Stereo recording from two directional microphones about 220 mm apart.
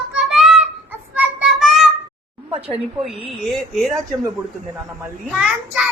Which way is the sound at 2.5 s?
25° right (ahead or behind).